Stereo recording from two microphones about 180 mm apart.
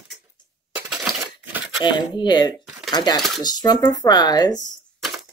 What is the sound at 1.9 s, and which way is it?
Speech, 25° left (ahead or behind).